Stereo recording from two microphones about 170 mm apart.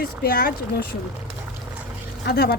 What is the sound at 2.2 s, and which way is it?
Speech, 70° left (ahead or behind).